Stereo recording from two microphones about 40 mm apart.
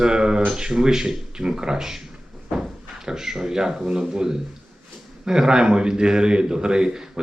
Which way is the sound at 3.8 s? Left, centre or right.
Centre.